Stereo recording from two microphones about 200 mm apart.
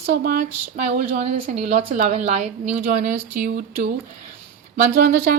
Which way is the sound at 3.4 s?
55° right (ahead or behind).